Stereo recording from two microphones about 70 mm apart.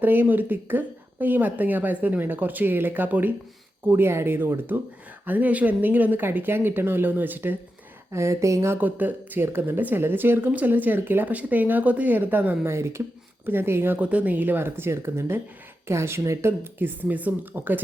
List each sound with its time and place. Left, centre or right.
0.0 s speech: right
8.1 s speech: right
8.7 s speech: right
12.6 s speech: right
14.0 s speech: right